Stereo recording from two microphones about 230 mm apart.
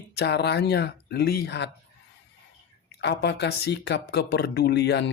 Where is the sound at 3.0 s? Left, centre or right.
Left.